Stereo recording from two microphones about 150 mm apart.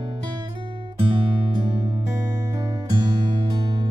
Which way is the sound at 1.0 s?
30° right (ahead or behind).